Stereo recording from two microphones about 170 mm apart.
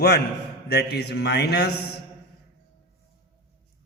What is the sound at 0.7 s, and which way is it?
A man's voice, 70° left (ahead or behind).